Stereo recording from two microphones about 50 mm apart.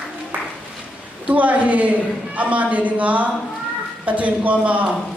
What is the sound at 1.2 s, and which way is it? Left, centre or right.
A man's voice, right.